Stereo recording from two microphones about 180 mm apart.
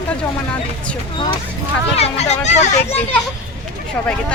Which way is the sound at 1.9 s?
35° left (ahead or behind).